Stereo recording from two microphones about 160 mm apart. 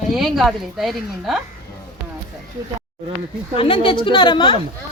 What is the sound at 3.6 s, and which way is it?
Speech, 35° left (ahead or behind).